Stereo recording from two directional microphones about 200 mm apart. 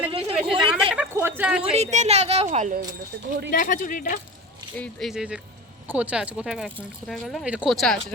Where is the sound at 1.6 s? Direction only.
35° right (ahead or behind).